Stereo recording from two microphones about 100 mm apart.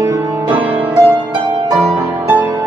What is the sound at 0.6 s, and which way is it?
Music, 15° right (ahead or behind).